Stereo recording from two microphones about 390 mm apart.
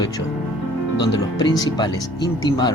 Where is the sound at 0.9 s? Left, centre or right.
Left.